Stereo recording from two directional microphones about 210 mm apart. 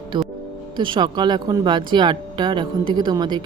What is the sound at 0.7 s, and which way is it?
Speech, 20° right (ahead or behind).